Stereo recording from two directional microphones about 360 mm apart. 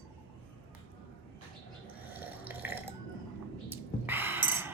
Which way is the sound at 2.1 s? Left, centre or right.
Centre.